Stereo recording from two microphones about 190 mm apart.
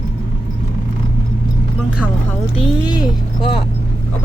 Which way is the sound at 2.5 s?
25° left (ahead or behind).